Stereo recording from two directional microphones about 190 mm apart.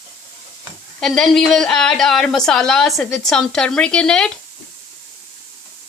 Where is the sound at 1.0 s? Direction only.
Centre (ahead or behind).